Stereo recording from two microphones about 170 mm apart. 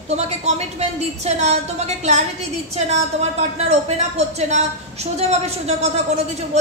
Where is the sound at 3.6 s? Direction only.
40° right (ahead or behind).